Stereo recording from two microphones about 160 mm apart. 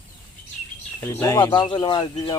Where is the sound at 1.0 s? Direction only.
15° left (ahead or behind).